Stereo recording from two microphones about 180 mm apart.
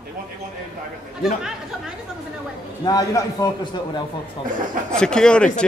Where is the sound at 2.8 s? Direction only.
20° left (ahead or behind).